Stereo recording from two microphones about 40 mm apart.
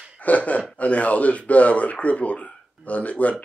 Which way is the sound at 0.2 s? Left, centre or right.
Left.